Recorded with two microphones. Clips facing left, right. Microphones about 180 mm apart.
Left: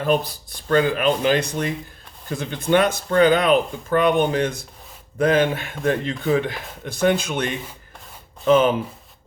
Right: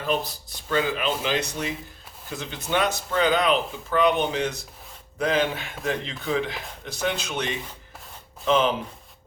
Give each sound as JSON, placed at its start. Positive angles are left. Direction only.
{"t": 0.7, "sound": "speech", "side_deg": 55}